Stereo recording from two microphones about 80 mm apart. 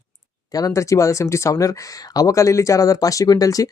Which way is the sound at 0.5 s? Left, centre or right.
Left.